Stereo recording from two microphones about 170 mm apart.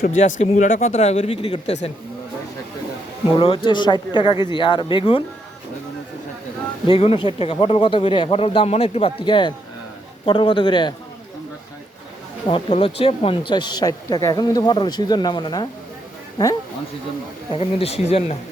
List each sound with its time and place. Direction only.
0.2 s speech: 45° left (ahead or behind)
3.3 s speech: 30° left (ahead or behind)
6.8 s speech: 30° left (ahead or behind)
12.5 s speech: 30° left (ahead or behind)
17.5 s speech: 35° left (ahead or behind)